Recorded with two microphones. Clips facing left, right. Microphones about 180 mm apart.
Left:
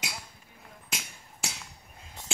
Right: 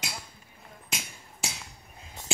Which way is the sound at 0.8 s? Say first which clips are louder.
Right 2 dB; centre (ahead or behind).